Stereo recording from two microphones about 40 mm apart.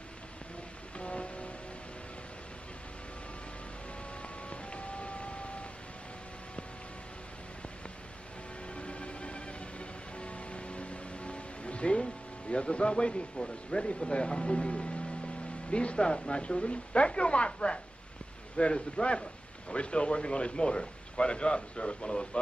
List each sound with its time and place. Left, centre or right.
0.9 s music: left
4.2 s music: left
8.7 s music: left
15.7 s speech: left